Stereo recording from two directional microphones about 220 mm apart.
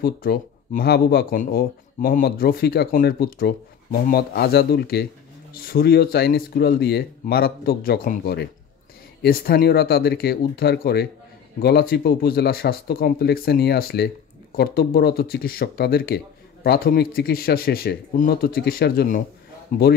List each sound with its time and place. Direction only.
0.0 s speech: 45° left (ahead or behind)